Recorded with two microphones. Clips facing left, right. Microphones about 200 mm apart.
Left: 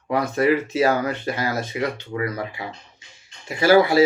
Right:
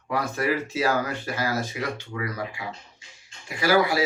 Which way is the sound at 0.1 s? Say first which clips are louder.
Left 6 dB; 20° left (ahead or behind).